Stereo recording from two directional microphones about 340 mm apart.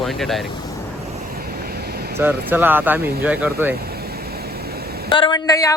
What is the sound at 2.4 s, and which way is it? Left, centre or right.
Speech, centre.